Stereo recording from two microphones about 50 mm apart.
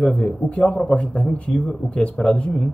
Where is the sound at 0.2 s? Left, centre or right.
Left.